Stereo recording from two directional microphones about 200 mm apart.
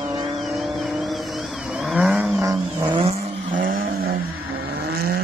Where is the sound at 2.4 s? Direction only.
15° right (ahead or behind).